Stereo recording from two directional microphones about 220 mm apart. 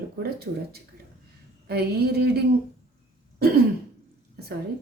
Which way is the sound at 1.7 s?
45° right (ahead or behind).